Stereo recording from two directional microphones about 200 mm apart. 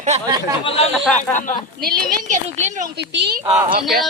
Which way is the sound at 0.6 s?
25° left (ahead or behind).